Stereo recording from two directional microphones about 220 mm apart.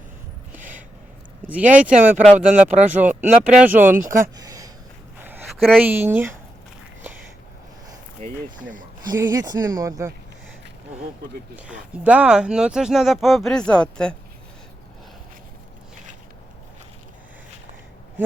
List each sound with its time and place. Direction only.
0.5 s a sound: 5° right (ahead or behind)
1.7 s speech: 5° right (ahead or behind)
2.1 s speech: 35° right (ahead or behind)
3.0 s speech: 5° right (ahead or behind)
4.4 s a sound: 15° right (ahead or behind)
5.5 s speech: centre (ahead or behind)
5.9 s speech: 10° right (ahead or behind)
8.2 s speech: 35° right (ahead or behind)
9.0 s speech: 15° right (ahead or behind)
11.7 s speech: 5° right (ahead or behind)